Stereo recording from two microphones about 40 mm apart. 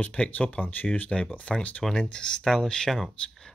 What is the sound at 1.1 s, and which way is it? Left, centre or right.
Speech, left.